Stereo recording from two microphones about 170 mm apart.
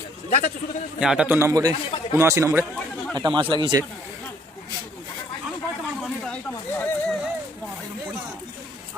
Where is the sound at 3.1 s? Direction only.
25° right (ahead or behind).